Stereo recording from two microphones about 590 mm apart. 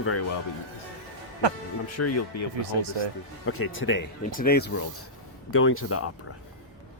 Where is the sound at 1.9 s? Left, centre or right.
Left.